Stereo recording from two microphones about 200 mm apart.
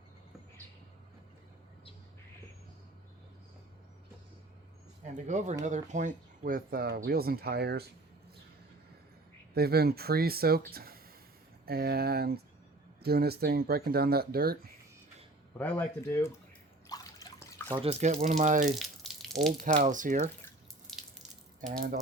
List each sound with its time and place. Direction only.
5.1 s speech: 35° right (ahead or behind); by 7.9 s 55° right (ahead or behind)
9.6 s speech: 50° right (ahead or behind)
15.8 s speech: 15° left (ahead or behind)
16.9 s water: 20° left (ahead or behind)
17.7 s speech: 30° right (ahead or behind)
18.8 s water: centre (ahead or behind)
19.6 s speech: 40° right (ahead or behind)
21.7 s speech: 50° right (ahead or behind)